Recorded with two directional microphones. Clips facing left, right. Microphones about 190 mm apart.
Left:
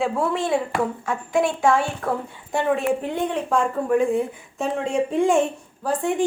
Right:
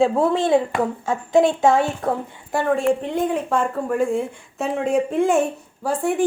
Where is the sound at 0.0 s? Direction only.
30° right (ahead or behind).